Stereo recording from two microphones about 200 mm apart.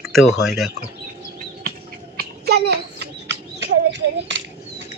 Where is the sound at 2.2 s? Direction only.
55° right (ahead or behind).